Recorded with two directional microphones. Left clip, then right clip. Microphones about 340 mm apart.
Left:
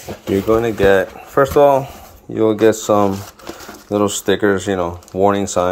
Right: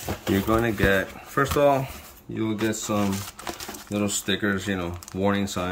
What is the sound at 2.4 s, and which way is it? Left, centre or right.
Speech, left.